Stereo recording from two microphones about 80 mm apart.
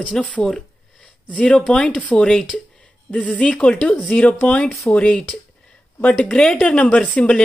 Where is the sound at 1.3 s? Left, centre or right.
Centre.